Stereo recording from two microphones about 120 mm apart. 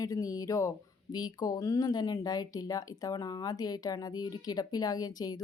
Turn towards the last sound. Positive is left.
turn(degrees=35)  # may be behind; listen again after turning